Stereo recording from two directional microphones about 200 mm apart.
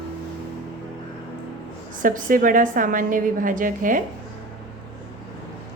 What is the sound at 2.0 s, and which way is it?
A woman's voice, 45° right (ahead or behind).